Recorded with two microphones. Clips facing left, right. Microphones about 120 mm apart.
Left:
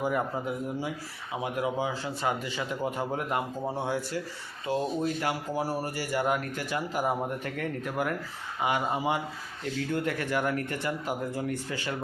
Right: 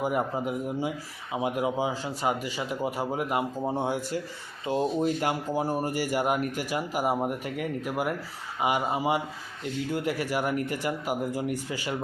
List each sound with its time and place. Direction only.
0.0 s speech: 20° right (ahead or behind)